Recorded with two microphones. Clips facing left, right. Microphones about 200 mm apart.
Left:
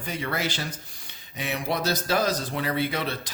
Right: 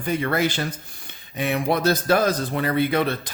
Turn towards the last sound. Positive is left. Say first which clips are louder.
# right 7 dB
turn(degrees=-55)  # may be behind; listen again after turning